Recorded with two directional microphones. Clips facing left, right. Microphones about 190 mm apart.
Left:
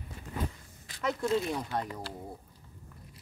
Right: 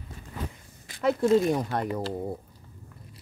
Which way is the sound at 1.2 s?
45° right (ahead or behind).